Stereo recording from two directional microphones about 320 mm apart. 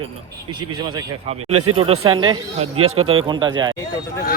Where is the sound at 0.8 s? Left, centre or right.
Centre.